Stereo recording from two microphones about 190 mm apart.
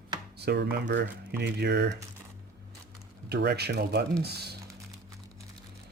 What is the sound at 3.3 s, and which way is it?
Speech, 55° right (ahead or behind).